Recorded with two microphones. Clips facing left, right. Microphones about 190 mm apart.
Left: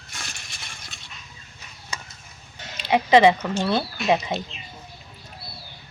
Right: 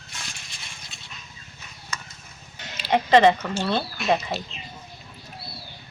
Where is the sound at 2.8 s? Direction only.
10° left (ahead or behind).